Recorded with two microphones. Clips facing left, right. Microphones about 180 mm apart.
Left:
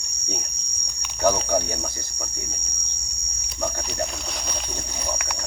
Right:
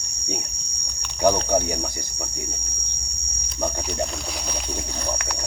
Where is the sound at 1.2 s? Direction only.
15° right (ahead or behind).